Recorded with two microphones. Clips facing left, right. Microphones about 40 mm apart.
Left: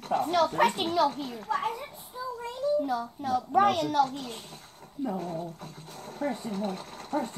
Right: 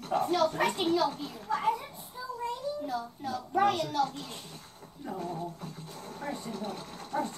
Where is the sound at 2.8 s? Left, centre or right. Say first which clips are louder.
Left 5 dB; left.